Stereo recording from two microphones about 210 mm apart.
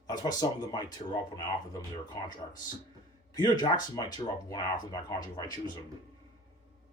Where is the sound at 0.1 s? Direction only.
20° left (ahead or behind).